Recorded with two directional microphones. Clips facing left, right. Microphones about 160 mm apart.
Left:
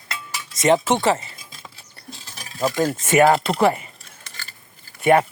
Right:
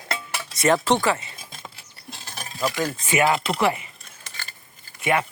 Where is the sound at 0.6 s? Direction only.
20° left (ahead or behind).